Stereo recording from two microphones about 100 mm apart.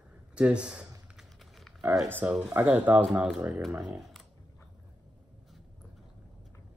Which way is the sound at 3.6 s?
Centre (ahead or behind).